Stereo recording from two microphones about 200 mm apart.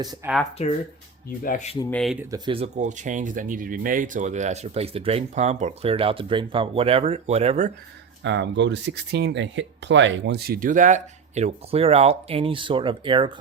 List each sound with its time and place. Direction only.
0.0 s speech: 20° right (ahead or behind)
0.6 s speech: 35° left (ahead or behind)
1.8 s speech: 5° left (ahead or behind)
2.3 s speech: 25° right (ahead or behind)
8.2 s speech: 65° right (ahead or behind); by 13.3 s 25° right (ahead or behind)